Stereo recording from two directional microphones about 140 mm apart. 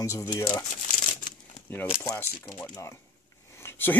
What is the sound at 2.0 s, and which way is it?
Speech, 20° left (ahead or behind).